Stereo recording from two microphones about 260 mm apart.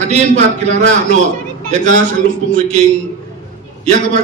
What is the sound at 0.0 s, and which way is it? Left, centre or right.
A man's voice, right.